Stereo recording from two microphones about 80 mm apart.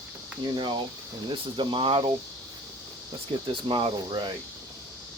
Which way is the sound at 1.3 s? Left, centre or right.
Right.